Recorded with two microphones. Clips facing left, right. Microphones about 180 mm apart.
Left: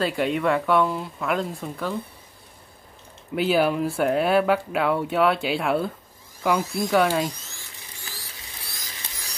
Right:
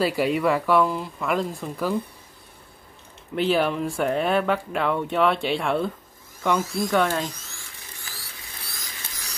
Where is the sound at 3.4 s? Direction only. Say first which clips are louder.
Left 1 dB; 5° left (ahead or behind).